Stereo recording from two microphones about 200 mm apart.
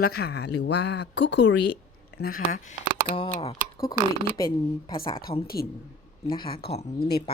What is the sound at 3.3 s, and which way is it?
Speech, 30° left (ahead or behind).